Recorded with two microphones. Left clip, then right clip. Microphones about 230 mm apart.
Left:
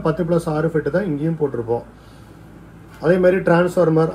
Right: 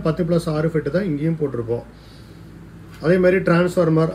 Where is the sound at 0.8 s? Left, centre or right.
Centre.